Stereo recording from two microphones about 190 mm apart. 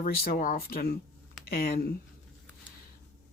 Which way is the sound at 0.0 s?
50° left (ahead or behind).